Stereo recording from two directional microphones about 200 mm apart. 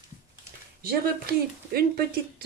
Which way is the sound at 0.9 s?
50° right (ahead or behind).